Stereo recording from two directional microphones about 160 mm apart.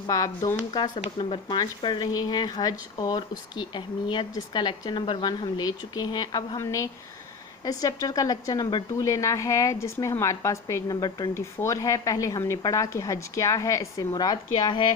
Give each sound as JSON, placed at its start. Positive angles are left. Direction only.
{"t": 0.1, "sound": "a woman's voice", "side_deg": 20}